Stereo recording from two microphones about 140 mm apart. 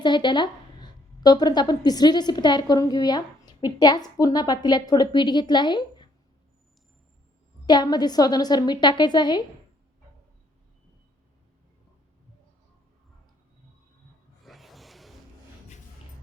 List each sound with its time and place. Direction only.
0.0 s a woman's voice: 35° left (ahead or behind)
7.7 s a woman's voice: 30° left (ahead or behind)
14.4 s a sound: centre (ahead or behind)